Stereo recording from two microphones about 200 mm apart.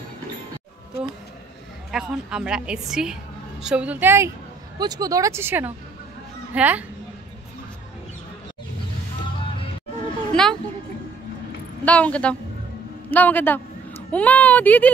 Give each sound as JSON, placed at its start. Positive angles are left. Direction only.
{"t": 1.9, "sound": "a woman's voice", "side_deg": -5}
{"t": 10.3, "sound": "a sound", "side_deg": 5}
{"t": 11.8, "sound": "speech", "side_deg": 5}